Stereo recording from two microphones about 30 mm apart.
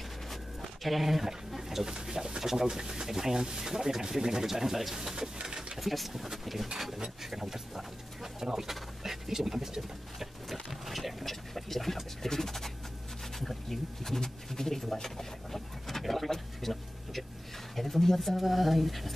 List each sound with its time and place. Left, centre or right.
0.3 s zipper: centre
1.6 s speech: centre
5.4 s pigeon: right
5.8 s speech: centre
8.5 s bird: centre
13.4 s bee: centre
16.0 s a sound: centre
18.3 s speech: centre